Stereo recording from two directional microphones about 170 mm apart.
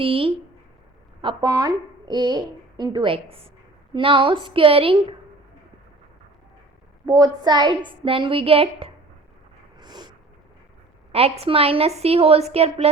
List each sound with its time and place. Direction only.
0.0 s speech: 35° right (ahead or behind)
1.5 s a woman's voice: 20° right (ahead or behind)
7.0 s a woman's voice: 20° right (ahead or behind)
9.8 s snort: 25° right (ahead or behind)
11.1 s a woman's voice: 35° right (ahead or behind)